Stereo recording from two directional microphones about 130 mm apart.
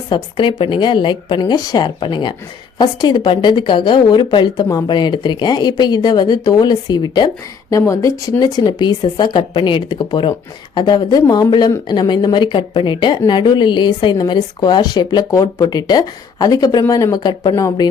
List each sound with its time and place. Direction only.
0.1 s a woman's voice: 40° left (ahead or behind); by 17.8 s 25° left (ahead or behind)